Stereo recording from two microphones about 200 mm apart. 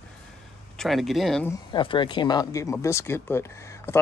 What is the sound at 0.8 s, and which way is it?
Speech, centre (ahead or behind).